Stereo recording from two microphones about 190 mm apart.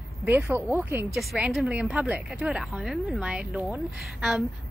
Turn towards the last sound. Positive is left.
turn(degrees=0)  # may be behind; listen again after turning